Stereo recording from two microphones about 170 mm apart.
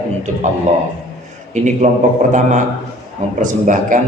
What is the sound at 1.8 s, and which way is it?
Speech, 40° right (ahead or behind).